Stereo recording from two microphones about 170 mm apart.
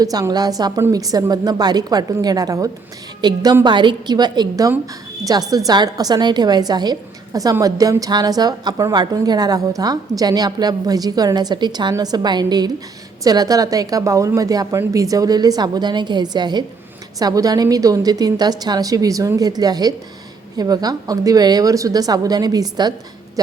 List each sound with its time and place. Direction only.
0.0 s a woman's voice: 20° right (ahead or behind)